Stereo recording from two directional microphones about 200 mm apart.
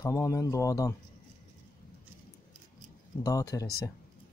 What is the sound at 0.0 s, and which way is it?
Speech, 15° left (ahead or behind).